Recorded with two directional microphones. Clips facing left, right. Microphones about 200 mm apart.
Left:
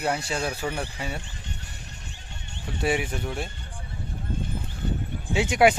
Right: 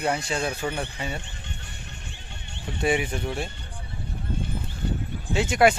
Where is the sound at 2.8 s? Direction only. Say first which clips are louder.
Right 2 dB; 5° left (ahead or behind).